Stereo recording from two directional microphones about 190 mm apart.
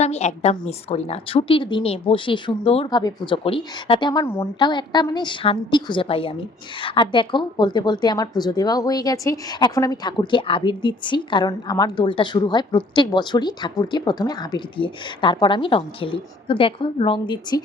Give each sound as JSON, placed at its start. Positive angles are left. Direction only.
{"t": 0.0, "sound": "a woman's voice", "side_deg": 35}